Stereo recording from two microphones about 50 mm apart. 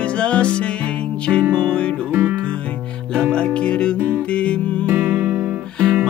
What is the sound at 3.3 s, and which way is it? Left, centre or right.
Music, left.